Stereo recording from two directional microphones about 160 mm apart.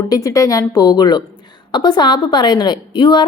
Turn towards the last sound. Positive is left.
turn(degrees=30)  # may be behind; listen again after turning